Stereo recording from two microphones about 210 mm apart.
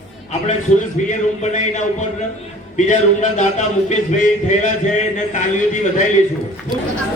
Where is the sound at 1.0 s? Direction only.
35° left (ahead or behind).